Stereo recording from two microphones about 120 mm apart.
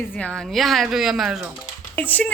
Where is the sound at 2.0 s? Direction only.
15° left (ahead or behind).